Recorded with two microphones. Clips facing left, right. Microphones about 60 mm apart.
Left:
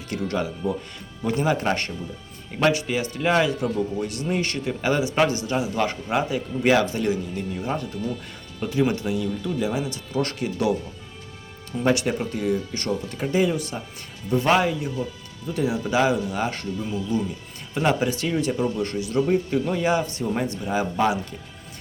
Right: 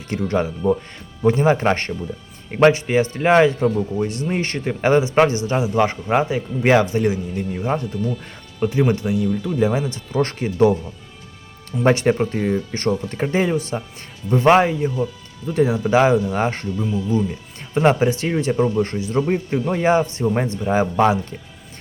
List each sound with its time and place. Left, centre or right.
0.3 s speech: right
8.9 s speech: right
11.9 s speech: right
17.7 s speech: right